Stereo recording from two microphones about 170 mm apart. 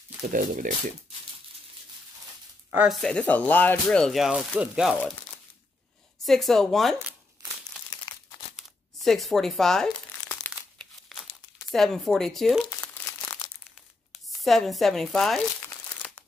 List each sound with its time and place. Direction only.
0.2 s speech: 50° right (ahead or behind)
2.7 s speech: 5° right (ahead or behind)
6.2 s speech: centre (ahead or behind)
8.5 s speech: centre (ahead or behind)
10.4 s crumpling: 5° left (ahead or behind)
11.7 s speech: centre (ahead or behind)
12.8 s crumpling: 15° left (ahead or behind)
14.1 s speech: centre (ahead or behind)
15.6 s crumpling: 10° left (ahead or behind)